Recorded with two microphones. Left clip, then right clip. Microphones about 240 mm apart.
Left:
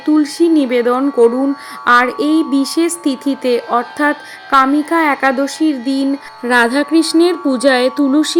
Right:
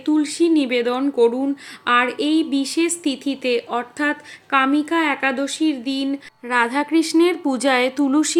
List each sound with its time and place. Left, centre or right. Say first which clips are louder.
0.0 s a woman's voice: left 6 dB; centre